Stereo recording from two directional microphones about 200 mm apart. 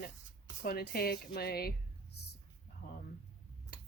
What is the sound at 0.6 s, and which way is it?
Speech, 50° left (ahead or behind).